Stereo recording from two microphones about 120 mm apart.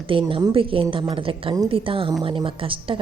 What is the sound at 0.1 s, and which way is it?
A woman's voice, 45° right (ahead or behind).